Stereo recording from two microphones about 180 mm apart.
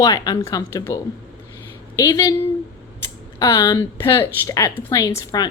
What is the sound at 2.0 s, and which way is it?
Speech, 20° left (ahead or behind).